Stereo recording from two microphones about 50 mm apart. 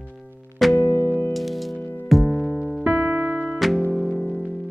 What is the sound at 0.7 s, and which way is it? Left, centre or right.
Music, left.